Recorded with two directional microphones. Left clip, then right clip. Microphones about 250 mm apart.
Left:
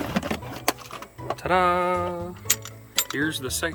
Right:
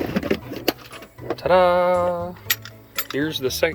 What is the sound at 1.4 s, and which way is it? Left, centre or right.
Music, centre.